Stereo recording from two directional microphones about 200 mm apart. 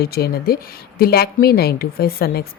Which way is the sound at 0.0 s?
50° left (ahead or behind).